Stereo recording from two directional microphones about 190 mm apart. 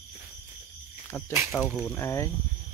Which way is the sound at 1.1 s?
15° left (ahead or behind).